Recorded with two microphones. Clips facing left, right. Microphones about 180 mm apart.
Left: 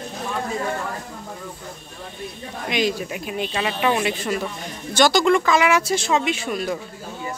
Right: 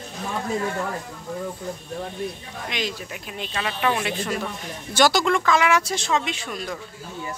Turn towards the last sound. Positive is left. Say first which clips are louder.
# left 6 dB
turn(degrees=5)  # may be behind; listen again after turning